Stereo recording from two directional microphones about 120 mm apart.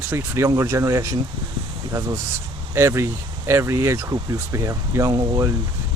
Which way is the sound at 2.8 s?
20° right (ahead or behind).